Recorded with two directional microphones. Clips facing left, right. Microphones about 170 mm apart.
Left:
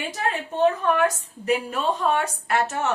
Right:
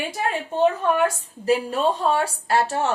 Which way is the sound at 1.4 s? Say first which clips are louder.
Right 3 dB; 35° right (ahead or behind).